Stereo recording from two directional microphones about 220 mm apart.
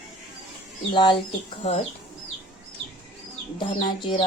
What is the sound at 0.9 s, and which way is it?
Speech, 20° left (ahead or behind).